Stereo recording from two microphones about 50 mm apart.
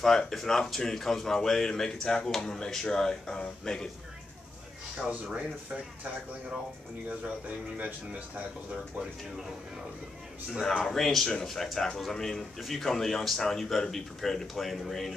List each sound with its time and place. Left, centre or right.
0.0 s speech: centre
4.9 s speech: right
7.1 s speech: right
10.9 s speech: centre